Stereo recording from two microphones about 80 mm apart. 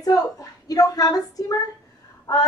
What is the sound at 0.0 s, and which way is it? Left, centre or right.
Speech, left.